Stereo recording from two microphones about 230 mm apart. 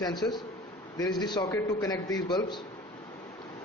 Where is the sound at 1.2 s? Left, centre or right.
Centre.